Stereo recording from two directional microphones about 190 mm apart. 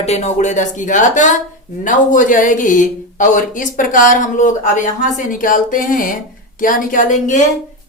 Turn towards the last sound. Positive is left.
turn(degrees=40)  # may be behind; listen again after turning